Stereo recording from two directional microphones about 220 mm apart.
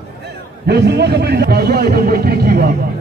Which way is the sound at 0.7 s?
50° right (ahead or behind).